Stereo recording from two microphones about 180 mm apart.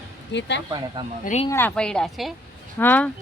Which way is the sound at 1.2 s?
40° left (ahead or behind).